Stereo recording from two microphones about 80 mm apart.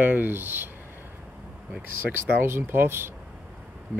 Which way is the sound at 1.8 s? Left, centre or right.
Right.